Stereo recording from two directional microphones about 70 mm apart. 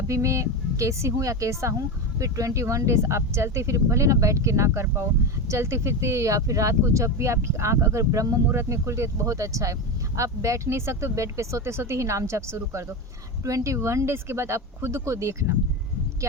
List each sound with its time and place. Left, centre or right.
0.1 s speech: right
8.4 s speech: right